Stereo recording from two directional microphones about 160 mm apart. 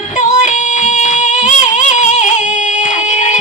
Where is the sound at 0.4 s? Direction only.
50° left (ahead or behind).